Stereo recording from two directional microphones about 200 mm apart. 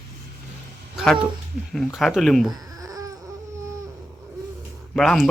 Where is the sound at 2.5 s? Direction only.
20° right (ahead or behind).